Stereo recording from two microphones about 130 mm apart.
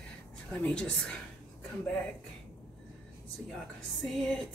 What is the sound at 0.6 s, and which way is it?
Speech, 10° left (ahead or behind).